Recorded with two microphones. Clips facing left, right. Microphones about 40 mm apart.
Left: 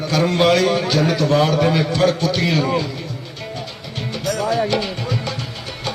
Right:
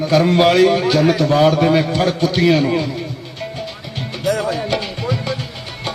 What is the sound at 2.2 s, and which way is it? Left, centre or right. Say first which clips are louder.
Speech: right 4 dB; centre.